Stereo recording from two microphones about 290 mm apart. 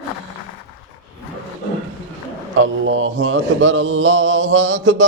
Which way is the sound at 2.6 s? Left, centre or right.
Right.